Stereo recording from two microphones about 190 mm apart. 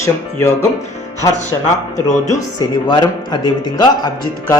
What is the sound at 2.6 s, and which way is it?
A man's voice, 25° left (ahead or behind).